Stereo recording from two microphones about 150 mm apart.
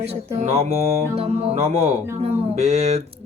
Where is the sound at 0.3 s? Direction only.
50° right (ahead or behind).